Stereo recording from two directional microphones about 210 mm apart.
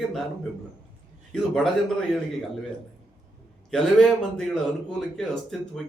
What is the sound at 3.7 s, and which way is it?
A man's voice, centre (ahead or behind).